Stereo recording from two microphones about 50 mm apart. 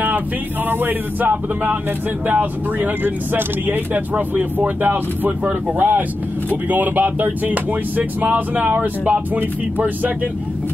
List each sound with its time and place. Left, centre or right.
0.7 s speech: right